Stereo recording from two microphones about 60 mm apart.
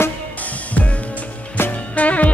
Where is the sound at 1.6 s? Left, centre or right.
Left.